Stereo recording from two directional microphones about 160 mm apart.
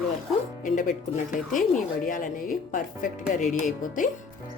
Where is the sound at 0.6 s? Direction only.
55° left (ahead or behind).